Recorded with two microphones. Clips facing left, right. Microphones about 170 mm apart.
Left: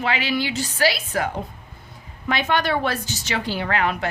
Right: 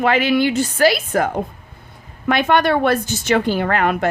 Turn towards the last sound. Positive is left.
turn(degrees=-50)  # may be behind; listen again after turning